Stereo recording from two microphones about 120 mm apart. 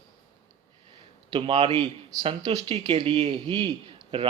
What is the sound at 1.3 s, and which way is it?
A man's voice, 45° right (ahead or behind).